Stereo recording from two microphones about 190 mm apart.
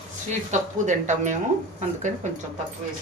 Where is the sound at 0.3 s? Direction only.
40° right (ahead or behind).